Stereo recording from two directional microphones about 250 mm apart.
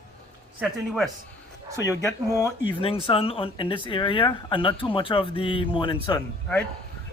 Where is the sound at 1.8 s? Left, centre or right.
Centre.